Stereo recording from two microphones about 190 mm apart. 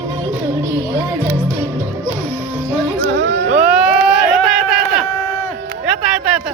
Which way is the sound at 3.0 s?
60° right (ahead or behind).